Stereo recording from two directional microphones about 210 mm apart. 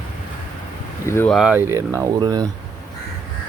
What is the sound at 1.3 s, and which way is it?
Speech, 5° right (ahead or behind).